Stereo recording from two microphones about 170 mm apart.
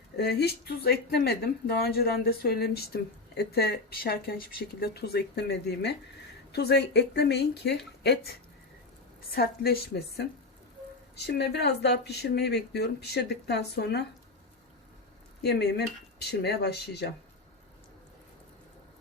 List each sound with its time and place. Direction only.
0.2 s speech: 75° left (ahead or behind)
9.3 s a woman's voice: 65° left (ahead or behind)
11.3 s speech: 80° left
15.4 s speech: 75° left (ahead or behind)